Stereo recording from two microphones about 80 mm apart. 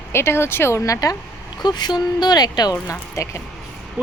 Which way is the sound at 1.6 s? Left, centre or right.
Left.